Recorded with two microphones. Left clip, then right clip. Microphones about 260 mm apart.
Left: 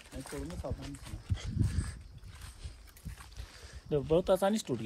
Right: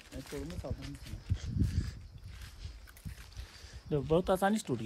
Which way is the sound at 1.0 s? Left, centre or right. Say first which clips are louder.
Left 2 dB; centre.